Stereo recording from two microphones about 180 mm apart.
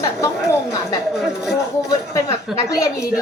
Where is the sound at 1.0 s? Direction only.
Centre (ahead or behind).